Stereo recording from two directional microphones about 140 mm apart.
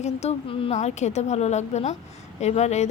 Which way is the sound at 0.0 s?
50° left (ahead or behind).